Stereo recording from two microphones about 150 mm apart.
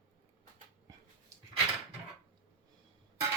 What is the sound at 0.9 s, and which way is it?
Dog, 20° right (ahead or behind).